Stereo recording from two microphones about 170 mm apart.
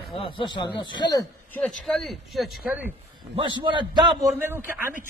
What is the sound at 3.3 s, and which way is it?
Speech, 30° right (ahead or behind).